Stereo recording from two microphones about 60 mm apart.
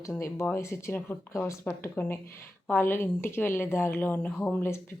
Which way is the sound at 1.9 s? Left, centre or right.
Left.